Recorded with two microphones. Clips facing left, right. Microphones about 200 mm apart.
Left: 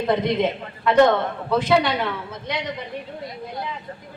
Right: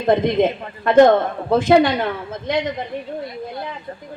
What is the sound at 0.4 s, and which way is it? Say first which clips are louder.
A woman's voice: right 4 dB; 50° right (ahead or behind).